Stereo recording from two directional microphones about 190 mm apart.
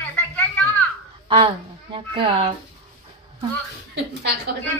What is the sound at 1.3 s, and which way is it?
A woman's voice, 30° right (ahead or behind).